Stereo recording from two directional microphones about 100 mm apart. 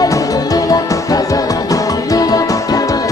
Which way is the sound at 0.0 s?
35° left (ahead or behind).